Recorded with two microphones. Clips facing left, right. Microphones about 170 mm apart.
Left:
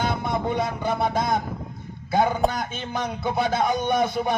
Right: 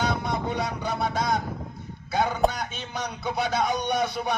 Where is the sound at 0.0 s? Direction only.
50° left (ahead or behind).